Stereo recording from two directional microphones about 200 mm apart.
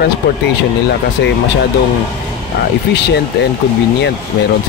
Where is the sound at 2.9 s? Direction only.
55° left (ahead or behind).